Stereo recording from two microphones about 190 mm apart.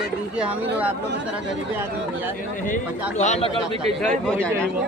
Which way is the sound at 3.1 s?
35° left (ahead or behind).